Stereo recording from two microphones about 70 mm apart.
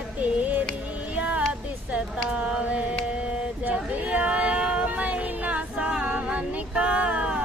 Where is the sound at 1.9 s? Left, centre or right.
Centre.